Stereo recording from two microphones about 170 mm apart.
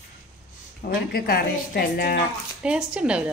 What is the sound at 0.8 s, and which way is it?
Speech, 60° left (ahead or behind).